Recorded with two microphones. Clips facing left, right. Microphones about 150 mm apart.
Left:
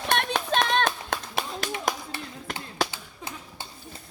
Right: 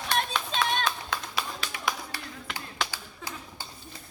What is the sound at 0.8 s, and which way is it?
Clapping, 50° left (ahead or behind).